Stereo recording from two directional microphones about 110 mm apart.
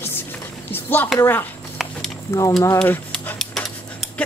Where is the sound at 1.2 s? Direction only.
20° left (ahead or behind).